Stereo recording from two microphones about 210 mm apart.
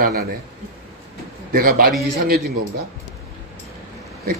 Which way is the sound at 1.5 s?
45° right (ahead or behind).